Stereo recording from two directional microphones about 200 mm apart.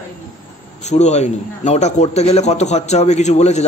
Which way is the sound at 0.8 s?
35° left (ahead or behind).